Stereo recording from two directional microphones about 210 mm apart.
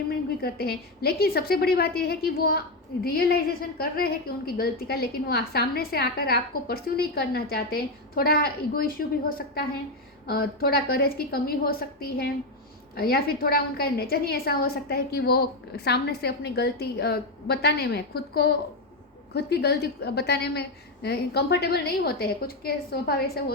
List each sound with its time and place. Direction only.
0.1 s a woman's voice: 45° left (ahead or behind)
10.2 s a woman's voice: 45° left (ahead or behind)